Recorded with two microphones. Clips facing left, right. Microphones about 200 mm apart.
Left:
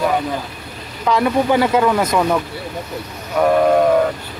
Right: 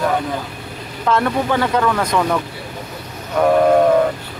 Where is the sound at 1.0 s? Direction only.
Centre (ahead or behind).